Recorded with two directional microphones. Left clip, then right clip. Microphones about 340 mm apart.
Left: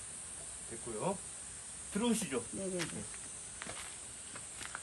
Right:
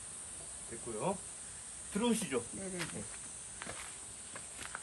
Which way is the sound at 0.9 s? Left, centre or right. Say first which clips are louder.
Right 1 dB; centre.